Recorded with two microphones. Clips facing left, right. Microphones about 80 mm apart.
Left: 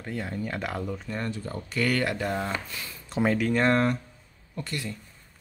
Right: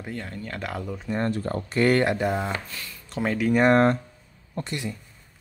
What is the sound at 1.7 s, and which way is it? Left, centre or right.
Speech, right.